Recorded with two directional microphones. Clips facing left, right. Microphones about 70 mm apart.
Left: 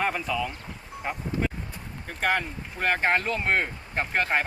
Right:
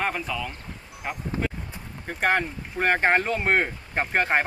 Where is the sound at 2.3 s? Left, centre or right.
Right.